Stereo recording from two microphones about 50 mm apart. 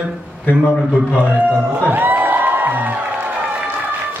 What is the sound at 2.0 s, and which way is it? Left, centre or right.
Music, right.